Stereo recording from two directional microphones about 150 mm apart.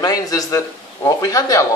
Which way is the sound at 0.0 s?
25° left (ahead or behind).